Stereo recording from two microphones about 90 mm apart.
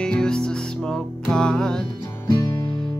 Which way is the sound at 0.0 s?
10° left (ahead or behind).